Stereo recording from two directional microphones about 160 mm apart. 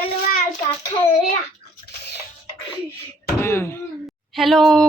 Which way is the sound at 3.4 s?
15° left (ahead or behind).